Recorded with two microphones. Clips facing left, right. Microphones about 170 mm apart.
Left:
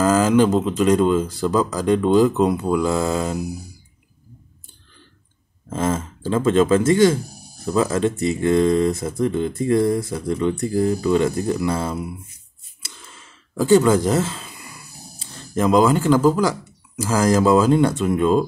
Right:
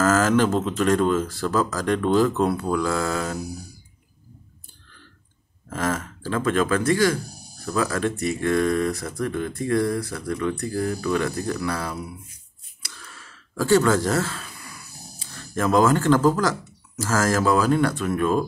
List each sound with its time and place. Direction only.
0.0 s speech: 15° left (ahead or behind)
5.7 s speech: 20° left (ahead or behind)